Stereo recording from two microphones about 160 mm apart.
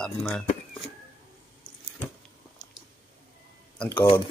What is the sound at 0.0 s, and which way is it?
Speech, 5° left (ahead or behind).